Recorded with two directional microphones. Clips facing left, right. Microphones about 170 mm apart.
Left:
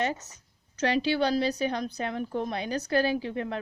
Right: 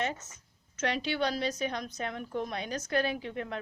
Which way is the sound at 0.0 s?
35° left (ahead or behind).